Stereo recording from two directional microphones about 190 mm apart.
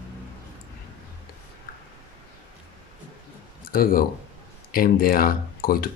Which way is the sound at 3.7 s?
50° left (ahead or behind).